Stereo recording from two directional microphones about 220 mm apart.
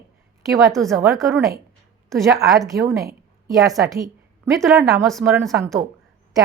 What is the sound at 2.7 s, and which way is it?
Speech, 15° right (ahead or behind).